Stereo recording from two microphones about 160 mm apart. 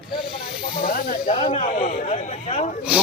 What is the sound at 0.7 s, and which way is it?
Snake, 65° left (ahead or behind).